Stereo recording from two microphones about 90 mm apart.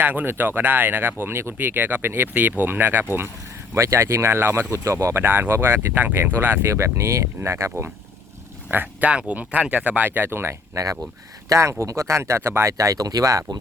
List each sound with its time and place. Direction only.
0.0 s speech: 20° right (ahead or behind)
8.7 s speech: 20° right (ahead or behind); by 13.6 s 40° right (ahead or behind)